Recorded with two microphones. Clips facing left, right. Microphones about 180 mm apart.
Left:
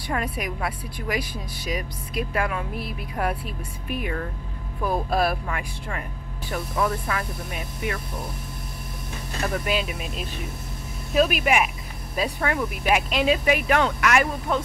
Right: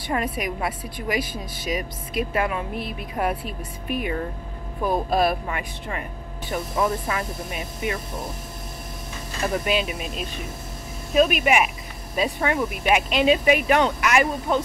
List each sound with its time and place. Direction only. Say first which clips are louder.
0.1 s speech: right 2 dB; 5° right (ahead or behind)
6.5 s speech: right 2 dB; 15° right (ahead or behind)
9.7 s speech: right 2 dB; centre (ahead or behind)